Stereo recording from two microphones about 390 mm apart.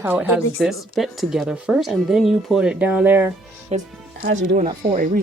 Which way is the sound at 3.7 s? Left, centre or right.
Centre.